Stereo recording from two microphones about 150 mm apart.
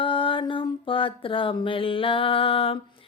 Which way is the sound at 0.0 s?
35° left (ahead or behind).